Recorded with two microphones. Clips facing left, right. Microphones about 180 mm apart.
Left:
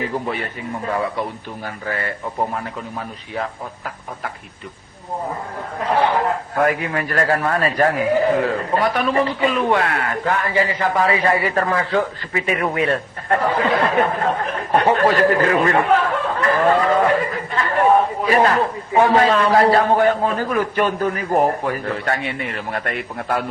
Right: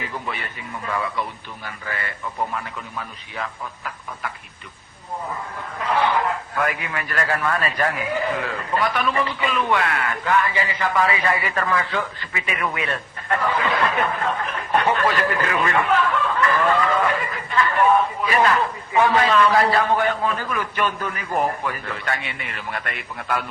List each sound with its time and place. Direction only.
0.0 s a man's voice: 40° left (ahead or behind)
5.8 s a man's voice: 40° left (ahead or behind)